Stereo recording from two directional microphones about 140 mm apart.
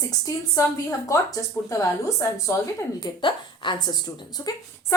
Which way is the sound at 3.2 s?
35° left (ahead or behind).